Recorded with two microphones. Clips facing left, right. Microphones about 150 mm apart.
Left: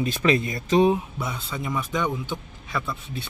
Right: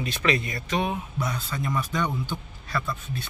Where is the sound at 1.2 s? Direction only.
5° left (ahead or behind).